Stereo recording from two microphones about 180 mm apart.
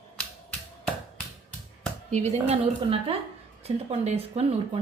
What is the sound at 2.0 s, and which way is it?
Speech, 40° right (ahead or behind).